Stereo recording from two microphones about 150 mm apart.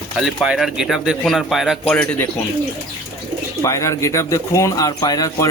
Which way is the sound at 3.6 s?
20° left (ahead or behind).